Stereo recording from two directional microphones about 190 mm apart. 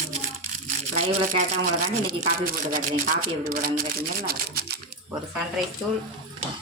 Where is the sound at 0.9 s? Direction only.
40° right (ahead or behind).